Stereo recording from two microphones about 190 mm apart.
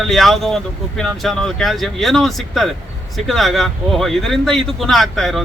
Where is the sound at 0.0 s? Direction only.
Centre (ahead or behind).